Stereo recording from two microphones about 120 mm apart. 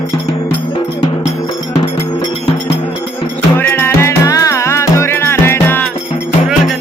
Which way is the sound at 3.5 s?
20° left (ahead or behind).